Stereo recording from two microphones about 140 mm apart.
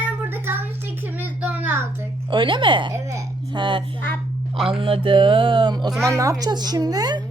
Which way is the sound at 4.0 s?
15° left (ahead or behind).